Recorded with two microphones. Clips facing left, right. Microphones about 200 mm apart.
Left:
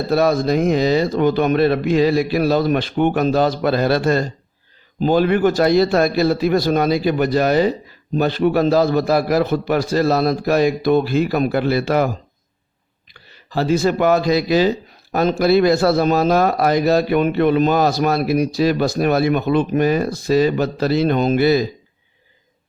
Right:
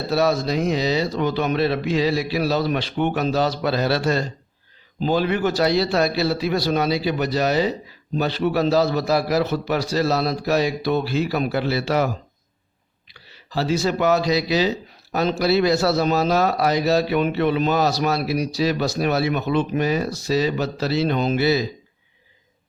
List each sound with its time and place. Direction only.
0.1 s speech: 50° left (ahead or behind)